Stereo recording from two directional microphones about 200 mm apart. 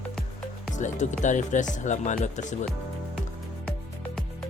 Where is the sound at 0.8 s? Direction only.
40° left (ahead or behind).